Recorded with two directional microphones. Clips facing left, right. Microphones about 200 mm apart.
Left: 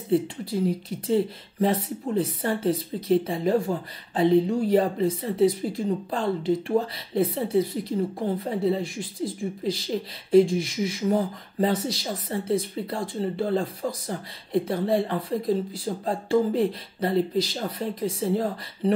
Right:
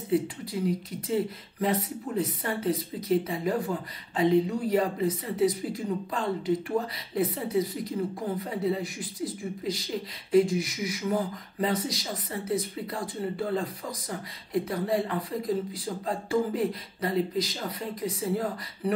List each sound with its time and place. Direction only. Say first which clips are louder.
0.1 s speech: left 3 dB; 30° left (ahead or behind)